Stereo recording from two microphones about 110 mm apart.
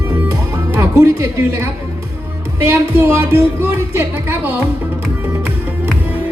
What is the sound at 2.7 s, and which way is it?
Speech, 20° right (ahead or behind).